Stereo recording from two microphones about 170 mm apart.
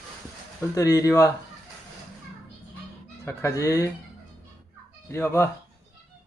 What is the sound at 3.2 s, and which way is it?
Speech, 20° left (ahead or behind).